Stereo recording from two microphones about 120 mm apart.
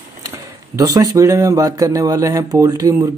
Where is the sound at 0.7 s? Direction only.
30° right (ahead or behind).